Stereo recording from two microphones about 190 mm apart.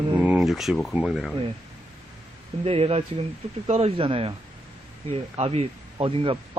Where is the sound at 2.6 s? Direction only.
30° right (ahead or behind).